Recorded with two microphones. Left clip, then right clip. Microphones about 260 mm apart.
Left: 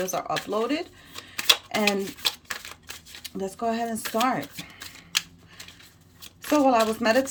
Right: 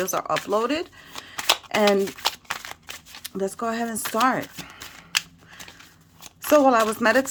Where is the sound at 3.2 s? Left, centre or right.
Centre.